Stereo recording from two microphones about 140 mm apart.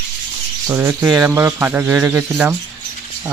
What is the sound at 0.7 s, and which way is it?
Speech, 20° right (ahead or behind).